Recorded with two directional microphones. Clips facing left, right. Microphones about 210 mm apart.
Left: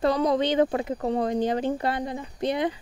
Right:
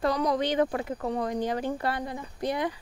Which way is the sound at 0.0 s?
25° left (ahead or behind).